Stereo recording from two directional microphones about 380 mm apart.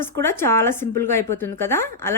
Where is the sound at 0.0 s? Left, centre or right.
Centre.